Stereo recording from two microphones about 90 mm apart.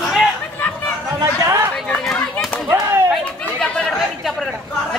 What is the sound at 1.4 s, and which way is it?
Chatter, 35° right (ahead or behind).